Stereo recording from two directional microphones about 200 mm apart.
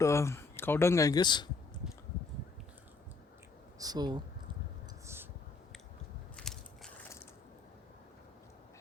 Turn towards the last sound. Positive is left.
turn(degrees=0)  # may be behind; listen again after turning